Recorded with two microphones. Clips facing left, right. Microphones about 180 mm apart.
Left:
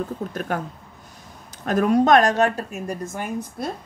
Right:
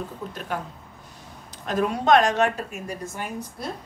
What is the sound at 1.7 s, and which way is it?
Speech, 45° left (ahead or behind).